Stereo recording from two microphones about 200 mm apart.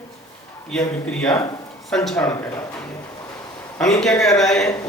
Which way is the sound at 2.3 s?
15° left (ahead or behind).